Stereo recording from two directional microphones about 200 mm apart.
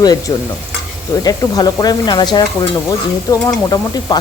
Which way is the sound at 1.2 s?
20° left (ahead or behind).